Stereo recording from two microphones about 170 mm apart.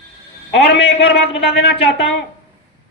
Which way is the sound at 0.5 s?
70° left (ahead or behind).